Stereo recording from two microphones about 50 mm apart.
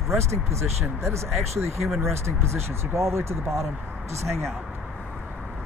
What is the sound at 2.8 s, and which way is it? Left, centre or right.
Speech, right.